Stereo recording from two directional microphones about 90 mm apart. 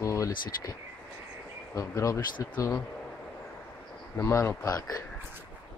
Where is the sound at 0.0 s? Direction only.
35° left (ahead or behind).